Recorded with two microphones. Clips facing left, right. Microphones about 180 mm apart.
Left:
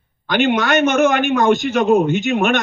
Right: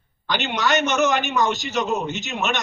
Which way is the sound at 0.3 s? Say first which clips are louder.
Left 7 dB; 55° left (ahead or behind).